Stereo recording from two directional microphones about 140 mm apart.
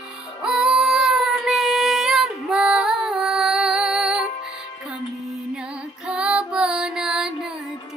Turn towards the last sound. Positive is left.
turn(degrees=-5)  # may be behind; listen again after turning